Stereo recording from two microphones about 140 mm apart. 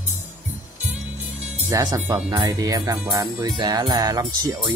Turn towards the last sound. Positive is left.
turn(degrees=-25)  # may be behind; listen again after turning